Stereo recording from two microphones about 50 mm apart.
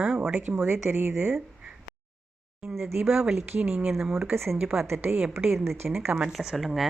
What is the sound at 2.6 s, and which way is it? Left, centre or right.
Speech, centre.